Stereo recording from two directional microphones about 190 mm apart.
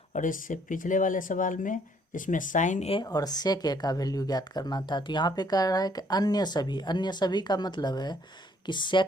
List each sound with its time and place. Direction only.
0.1 s speech: 45° left (ahead or behind); by 9.0 s 25° left (ahead or behind)